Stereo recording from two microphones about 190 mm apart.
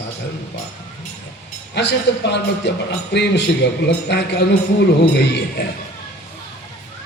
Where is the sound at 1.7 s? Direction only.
60° left (ahead or behind).